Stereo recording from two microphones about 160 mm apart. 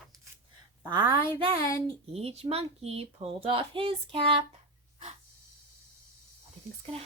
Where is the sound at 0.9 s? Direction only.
25° right (ahead or behind).